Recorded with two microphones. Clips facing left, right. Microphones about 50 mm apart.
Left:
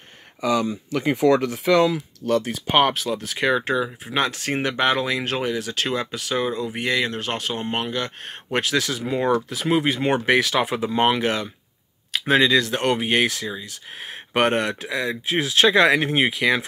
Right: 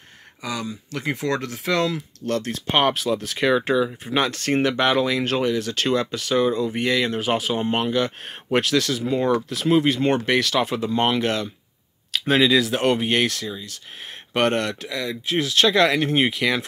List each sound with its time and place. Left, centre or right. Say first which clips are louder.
0.5 s speech: left 7 dB; left; by 16.6 s centre